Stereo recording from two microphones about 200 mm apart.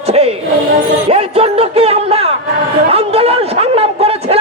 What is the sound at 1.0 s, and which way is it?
Music, 30° right (ahead or behind).